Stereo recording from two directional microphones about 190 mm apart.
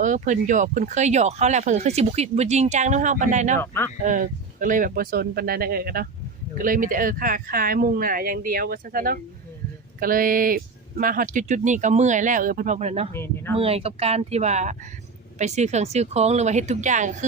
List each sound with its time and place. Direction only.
0.0 s speech: 40° right (ahead or behind)
3.6 s speech: 10° left (ahead or behind)
4.0 s speech: 45° right (ahead or behind)
13.1 s speech: 10° left (ahead or behind)
13.6 s speech: 30° right (ahead or behind)